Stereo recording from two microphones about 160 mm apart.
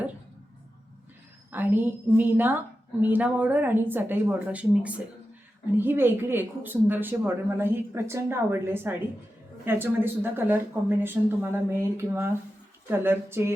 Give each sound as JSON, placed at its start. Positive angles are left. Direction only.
{"t": 1.5, "sound": "speech", "side_deg": -10}